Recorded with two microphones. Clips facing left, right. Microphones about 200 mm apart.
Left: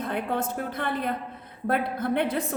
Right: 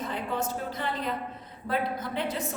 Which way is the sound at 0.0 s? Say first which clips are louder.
Left 3 dB; 60° left (ahead or behind).